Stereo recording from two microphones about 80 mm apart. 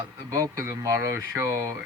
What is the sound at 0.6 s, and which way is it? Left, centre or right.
Speech, right.